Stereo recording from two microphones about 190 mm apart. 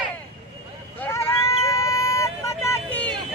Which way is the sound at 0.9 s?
15° left (ahead or behind).